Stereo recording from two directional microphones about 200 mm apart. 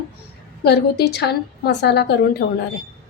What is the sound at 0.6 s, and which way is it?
A woman's voice, 55° left (ahead or behind).